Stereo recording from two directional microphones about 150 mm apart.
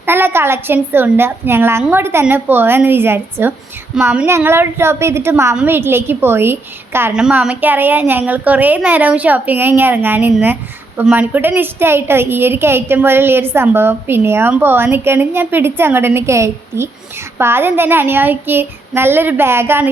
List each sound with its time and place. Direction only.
0.0 s a woman's voice: 15° right (ahead or behind)